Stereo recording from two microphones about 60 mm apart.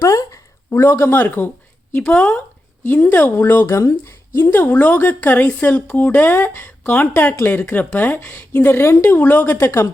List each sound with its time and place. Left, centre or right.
0.0 s a sound: left
0.7 s speech: left
1.9 s speech: left
2.8 s speech: left
3.7 s speech: left
4.4 s speech: left
4.7 s speech: left
9.0 s speech: left
9.6 s speech: left